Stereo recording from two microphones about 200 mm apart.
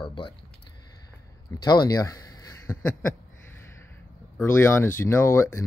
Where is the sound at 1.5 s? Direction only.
20° left (ahead or behind).